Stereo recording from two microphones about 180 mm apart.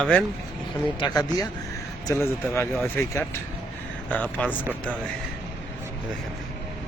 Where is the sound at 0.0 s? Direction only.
5° left (ahead or behind).